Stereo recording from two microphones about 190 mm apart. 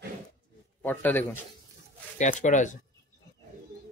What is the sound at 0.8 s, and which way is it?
Speech, 10° left (ahead or behind).